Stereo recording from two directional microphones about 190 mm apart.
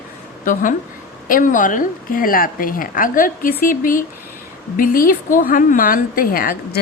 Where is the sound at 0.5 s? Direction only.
45° left (ahead or behind).